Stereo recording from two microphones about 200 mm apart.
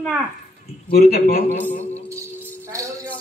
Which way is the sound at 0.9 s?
50° left (ahead or behind).